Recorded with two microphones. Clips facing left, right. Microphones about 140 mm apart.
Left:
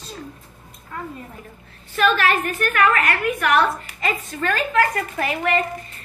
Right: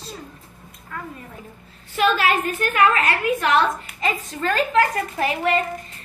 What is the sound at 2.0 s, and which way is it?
A woman's voice, 15° right (ahead or behind).